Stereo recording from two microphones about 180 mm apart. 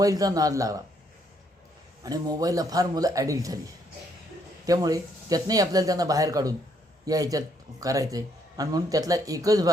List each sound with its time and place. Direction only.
0.0 s speech: 20° right (ahead or behind)
2.0 s speech: 20° right (ahead or behind)
4.6 s speech: 20° right (ahead or behind)